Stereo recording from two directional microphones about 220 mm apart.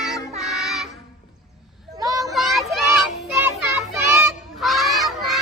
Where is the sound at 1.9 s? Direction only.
15° right (ahead or behind).